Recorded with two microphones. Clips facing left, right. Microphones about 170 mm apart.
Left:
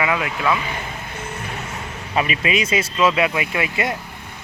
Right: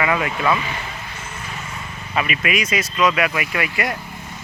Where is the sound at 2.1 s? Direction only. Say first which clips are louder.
Left 1 dB; 30° left (ahead or behind).